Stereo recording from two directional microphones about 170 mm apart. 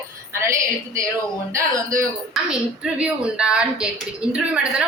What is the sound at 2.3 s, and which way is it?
A woman's voice, 5° right (ahead or behind).